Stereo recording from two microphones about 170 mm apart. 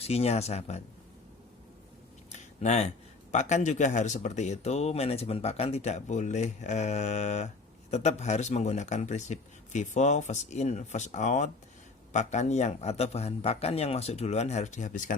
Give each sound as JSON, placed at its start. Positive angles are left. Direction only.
{"t": 0.0, "sound": "a man's voice", "side_deg": 35}
{"t": 2.3, "sound": "a sound", "side_deg": 40}
{"t": 3.3, "sound": "a man's voice", "side_deg": 45}